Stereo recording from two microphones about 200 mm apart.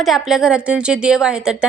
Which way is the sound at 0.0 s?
Centre (ahead or behind).